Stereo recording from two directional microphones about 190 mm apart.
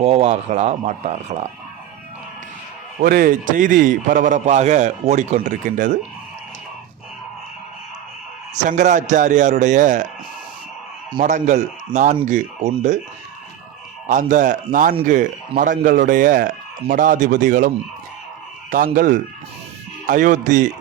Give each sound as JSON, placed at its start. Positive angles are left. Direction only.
{"t": 0.0, "sound": "a man's voice", "side_deg": -35}
{"t": 3.0, "sound": "a man's voice", "side_deg": -50}
{"t": 8.5, "sound": "a man's voice", "side_deg": -40}
{"t": 11.2, "sound": "a man's voice", "side_deg": -40}
{"t": 14.1, "sound": "a man's voice", "side_deg": -40}
{"t": 18.9, "sound": "a man's voice", "side_deg": -45}